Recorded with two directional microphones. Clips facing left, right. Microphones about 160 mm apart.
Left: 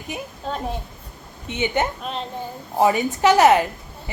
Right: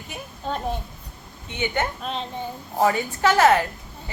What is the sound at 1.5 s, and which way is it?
Speech, 20° left (ahead or behind).